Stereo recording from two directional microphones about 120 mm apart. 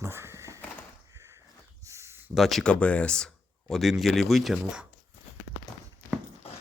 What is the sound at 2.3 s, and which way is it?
Speech, centre (ahead or behind).